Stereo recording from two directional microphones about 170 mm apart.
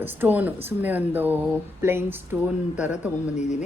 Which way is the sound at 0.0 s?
10° right (ahead or behind).